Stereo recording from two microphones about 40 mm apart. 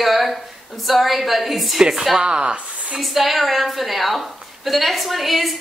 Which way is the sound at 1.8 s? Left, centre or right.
Centre.